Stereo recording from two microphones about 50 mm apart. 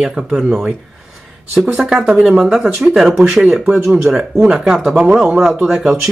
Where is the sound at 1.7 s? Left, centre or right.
Centre.